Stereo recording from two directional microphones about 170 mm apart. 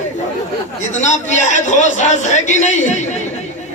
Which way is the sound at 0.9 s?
45° left (ahead or behind).